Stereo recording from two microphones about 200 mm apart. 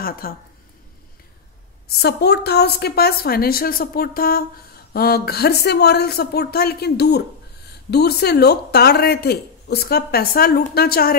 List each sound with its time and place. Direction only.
0.0 s speech: 45° left (ahead or behind)
1.9 s speech: 55° left (ahead or behind)